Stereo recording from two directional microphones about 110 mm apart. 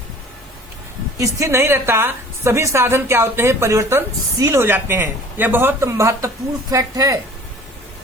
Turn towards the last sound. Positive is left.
turn(degrees=-30)  # may be behind; listen again after turning